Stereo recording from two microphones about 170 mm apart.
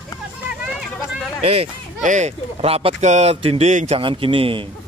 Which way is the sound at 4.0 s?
30° right (ahead or behind).